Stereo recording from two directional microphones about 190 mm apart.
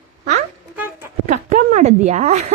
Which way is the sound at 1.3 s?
40° right (ahead or behind).